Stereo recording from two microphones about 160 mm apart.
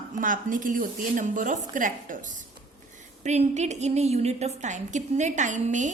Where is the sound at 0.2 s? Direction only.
55° right (ahead or behind).